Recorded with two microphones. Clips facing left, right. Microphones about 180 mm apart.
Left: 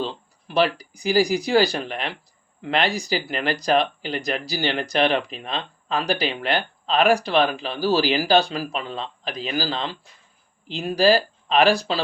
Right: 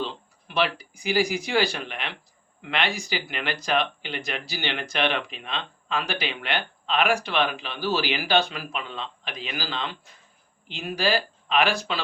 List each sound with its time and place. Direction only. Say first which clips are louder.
0.0 s speech: left 3 dB; 35° left (ahead or behind)